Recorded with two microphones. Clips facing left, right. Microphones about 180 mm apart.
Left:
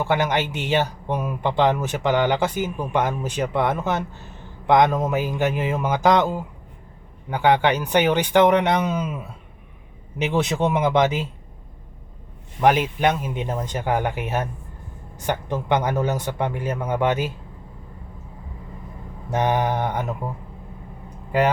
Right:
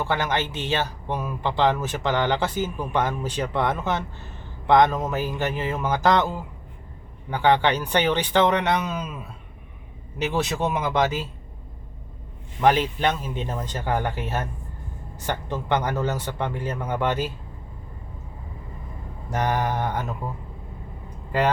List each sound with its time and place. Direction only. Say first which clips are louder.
0.0 s speech: left 3 dB; 15° left (ahead or behind)
10.2 s speech: left 3 dB; 20° left (ahead or behind)
12.6 s speech: left 2 dB; 10° left (ahead or behind)
19.3 s mantra: left 3 dB; 20° left (ahead or behind)